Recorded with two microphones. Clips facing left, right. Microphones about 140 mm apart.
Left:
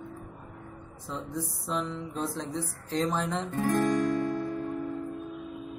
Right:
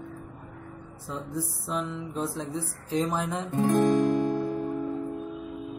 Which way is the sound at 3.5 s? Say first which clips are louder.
Right 4 dB; 15° right (ahead or behind).